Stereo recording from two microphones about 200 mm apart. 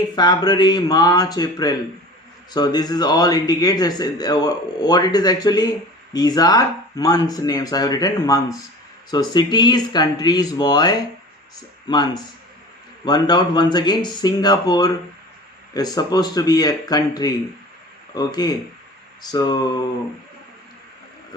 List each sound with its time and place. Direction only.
0.2 s speech: 20° left (ahead or behind)